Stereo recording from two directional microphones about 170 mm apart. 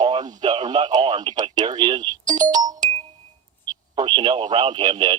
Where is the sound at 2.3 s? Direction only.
20° right (ahead or behind).